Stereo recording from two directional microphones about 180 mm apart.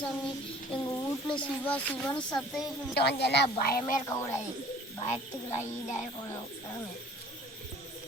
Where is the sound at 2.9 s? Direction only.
65° left (ahead or behind).